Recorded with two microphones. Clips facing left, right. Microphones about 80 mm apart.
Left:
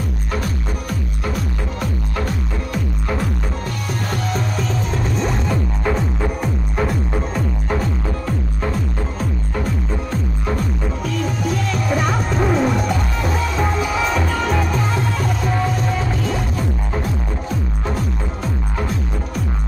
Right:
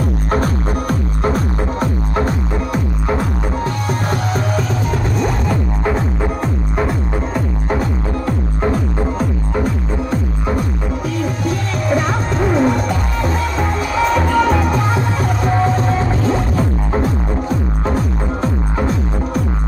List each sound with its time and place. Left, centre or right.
0.3 s music: right
5.2 s music: centre
6.2 s music: right
11.4 s music: centre
15.5 s music: right